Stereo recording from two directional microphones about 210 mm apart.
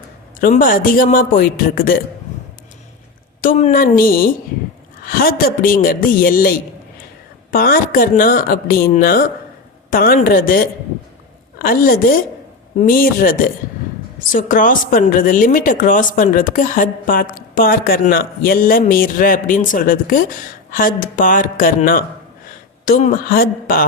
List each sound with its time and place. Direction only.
0.3 s speech: 40° left (ahead or behind)
3.4 s speech: 35° left (ahead or behind)
14.3 s speech: 40° left (ahead or behind)